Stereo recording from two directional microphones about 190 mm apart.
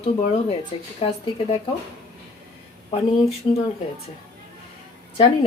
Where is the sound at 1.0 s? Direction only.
35° left (ahead or behind).